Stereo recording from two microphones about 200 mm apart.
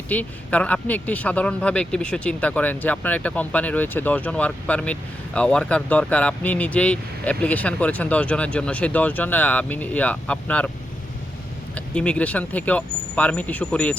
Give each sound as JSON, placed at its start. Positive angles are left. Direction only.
{"t": 0.1, "sound": "speech", "side_deg": 5}
{"t": 11.7, "sound": "speech", "side_deg": 5}